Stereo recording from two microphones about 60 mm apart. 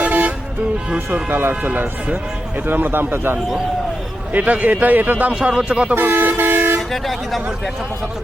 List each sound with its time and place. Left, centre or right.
0.0 s vehicle: right
0.9 s a man's voice: right
1.3 s a man's voice: right
4.3 s a man's voice: right
5.3 s speech: centre
5.9 s speech: right
6.9 s speech: centre